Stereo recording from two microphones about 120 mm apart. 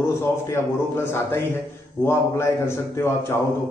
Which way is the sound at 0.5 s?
20° left (ahead or behind).